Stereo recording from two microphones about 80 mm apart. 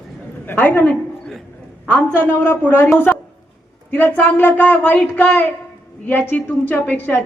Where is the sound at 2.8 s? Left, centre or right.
Left.